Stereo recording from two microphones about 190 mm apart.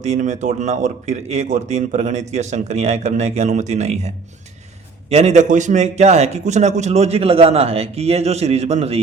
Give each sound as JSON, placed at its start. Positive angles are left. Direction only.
{"t": 0.0, "sound": "speech", "side_deg": -40}